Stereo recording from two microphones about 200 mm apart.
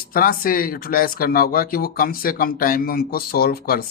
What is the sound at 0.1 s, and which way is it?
Speech, 45° left (ahead or behind).